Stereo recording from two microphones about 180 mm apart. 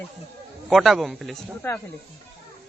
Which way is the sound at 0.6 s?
Centre (ahead or behind).